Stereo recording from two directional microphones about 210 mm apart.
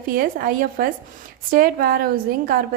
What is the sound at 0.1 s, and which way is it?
A woman's voice, 45° right (ahead or behind).